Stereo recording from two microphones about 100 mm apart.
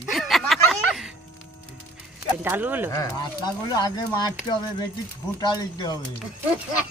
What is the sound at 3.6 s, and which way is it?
Speech, 40° left (ahead or behind).